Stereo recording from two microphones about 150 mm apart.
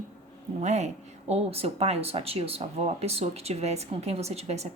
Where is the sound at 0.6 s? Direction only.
50° right (ahead or behind).